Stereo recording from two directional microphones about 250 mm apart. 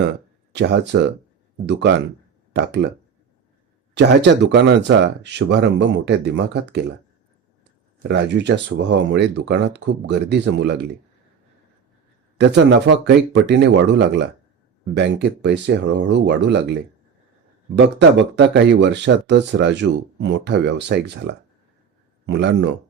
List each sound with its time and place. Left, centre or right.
0.5 s speech: right
3.9 s speech: right
8.0 s speech: right
12.4 s speech: right
17.7 s speech: right
22.3 s speech: right